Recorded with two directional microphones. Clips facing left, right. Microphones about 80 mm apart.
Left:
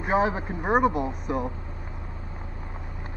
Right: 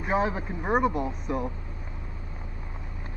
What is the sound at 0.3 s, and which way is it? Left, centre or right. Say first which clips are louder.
Speech: left 2 dB; left.